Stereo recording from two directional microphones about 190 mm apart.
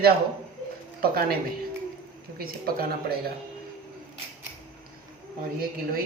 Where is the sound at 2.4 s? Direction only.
50° right (ahead or behind).